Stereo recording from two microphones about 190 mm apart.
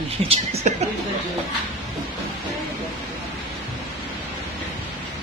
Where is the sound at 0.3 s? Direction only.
35° right (ahead or behind).